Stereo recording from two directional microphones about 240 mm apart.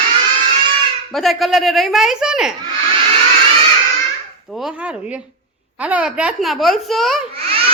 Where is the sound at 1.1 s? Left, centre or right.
Centre.